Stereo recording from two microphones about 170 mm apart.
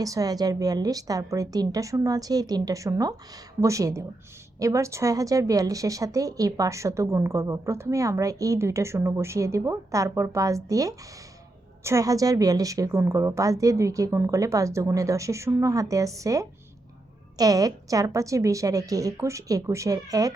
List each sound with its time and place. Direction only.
0.0 s a woman's voice: 20° right (ahead or behind)